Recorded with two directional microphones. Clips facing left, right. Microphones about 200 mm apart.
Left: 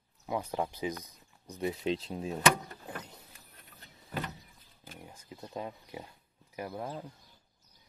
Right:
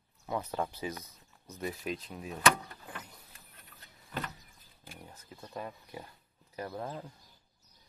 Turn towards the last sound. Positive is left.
turn(degrees=10)  # may be behind; listen again after turning